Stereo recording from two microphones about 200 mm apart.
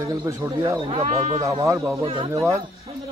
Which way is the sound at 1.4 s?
15° right (ahead or behind).